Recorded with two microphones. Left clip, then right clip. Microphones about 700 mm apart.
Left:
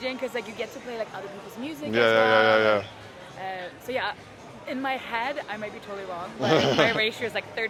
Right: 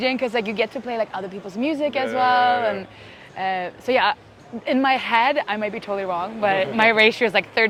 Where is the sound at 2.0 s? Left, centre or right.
Left.